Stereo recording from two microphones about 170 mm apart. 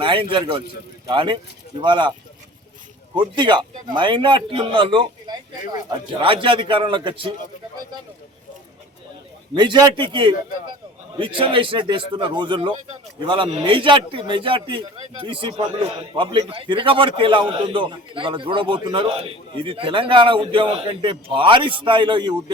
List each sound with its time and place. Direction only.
0.0 s a man's voice: 30° right (ahead or behind)
3.2 s a man's voice: 25° right (ahead or behind)
9.6 s a man's voice: 25° right (ahead or behind)